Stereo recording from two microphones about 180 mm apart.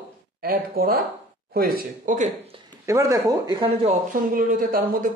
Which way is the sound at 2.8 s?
15° right (ahead or behind).